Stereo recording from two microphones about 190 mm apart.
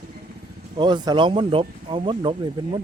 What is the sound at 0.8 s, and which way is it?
Speech, 25° right (ahead or behind).